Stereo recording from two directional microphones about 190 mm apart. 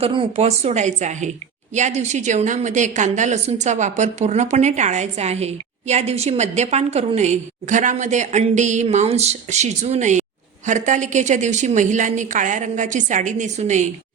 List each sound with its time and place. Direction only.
0.0 s a woman's voice: 25° right (ahead or behind)